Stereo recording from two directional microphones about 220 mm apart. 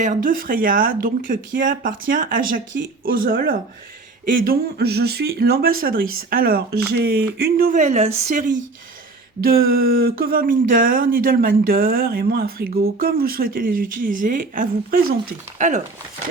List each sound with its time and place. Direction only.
0.0 s speech: 35° right (ahead or behind)